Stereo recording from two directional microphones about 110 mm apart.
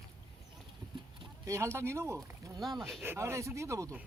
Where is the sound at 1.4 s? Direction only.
25° right (ahead or behind).